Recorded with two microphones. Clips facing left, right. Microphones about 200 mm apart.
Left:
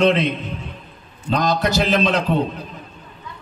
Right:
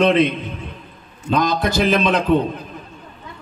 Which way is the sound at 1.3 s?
50° right (ahead or behind).